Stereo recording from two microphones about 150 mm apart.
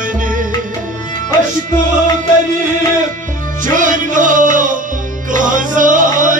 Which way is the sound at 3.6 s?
60° right (ahead or behind).